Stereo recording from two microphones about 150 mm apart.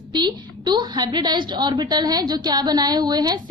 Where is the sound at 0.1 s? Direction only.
30° right (ahead or behind).